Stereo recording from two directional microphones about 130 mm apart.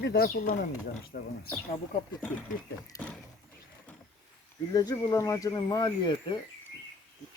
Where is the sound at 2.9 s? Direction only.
25° left (ahead or behind).